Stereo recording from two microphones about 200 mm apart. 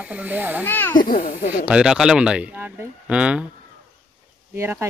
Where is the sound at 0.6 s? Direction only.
10° left (ahead or behind).